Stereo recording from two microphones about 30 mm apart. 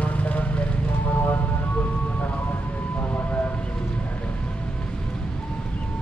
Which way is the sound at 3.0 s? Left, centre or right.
Left.